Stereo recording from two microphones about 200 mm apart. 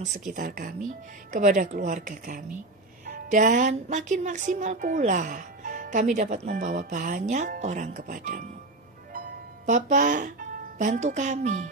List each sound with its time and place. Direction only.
0.0 s speech: 40° right (ahead or behind)
9.1 s music: 40° right (ahead or behind)
10.8 s speech: 40° right (ahead or behind)